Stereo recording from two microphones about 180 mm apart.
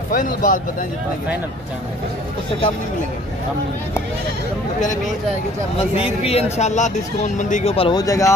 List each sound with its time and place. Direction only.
0.1 s speech: 50° left (ahead or behind)
6.2 s speech: 35° left (ahead or behind)
7.7 s speech: 30° left (ahead or behind)
8.0 s speech: 20° left (ahead or behind)